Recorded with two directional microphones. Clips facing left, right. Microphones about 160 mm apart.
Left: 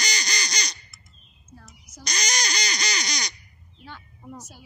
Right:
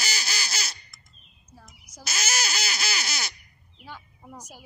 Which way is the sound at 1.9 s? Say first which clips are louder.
Left 1 dB; 5° right (ahead or behind).